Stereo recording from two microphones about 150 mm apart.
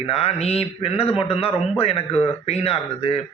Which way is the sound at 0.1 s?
40° left (ahead or behind).